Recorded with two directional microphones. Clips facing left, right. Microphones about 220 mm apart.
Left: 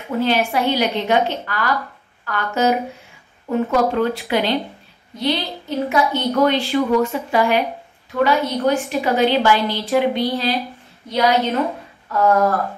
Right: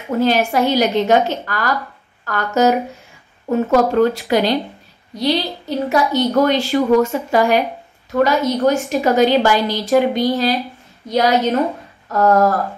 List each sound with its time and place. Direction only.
0.1 s a woman's voice: 40° right (ahead or behind)